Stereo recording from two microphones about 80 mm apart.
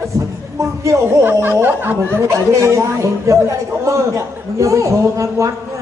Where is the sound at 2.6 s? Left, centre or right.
Right.